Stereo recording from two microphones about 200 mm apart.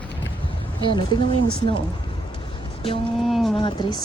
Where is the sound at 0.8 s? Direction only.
25° left (ahead or behind).